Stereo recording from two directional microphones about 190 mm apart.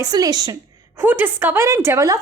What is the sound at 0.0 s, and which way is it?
A woman's voice, 20° right (ahead or behind).